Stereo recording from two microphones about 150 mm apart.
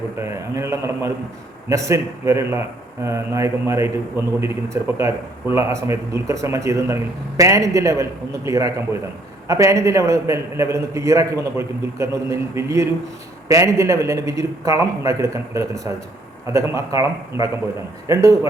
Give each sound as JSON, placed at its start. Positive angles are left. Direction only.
{"t": 0.2, "sound": "a man's voice", "side_deg": -20}